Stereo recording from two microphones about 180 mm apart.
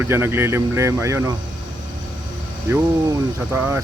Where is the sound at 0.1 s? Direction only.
15° right (ahead or behind).